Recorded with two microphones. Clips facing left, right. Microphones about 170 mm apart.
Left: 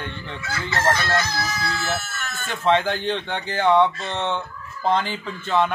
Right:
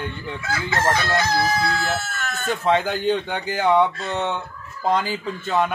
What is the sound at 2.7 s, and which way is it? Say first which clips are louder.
A man's voice: even; 10° right (ahead or behind).